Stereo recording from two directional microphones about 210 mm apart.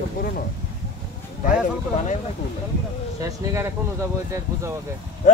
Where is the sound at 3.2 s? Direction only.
15° right (ahead or behind).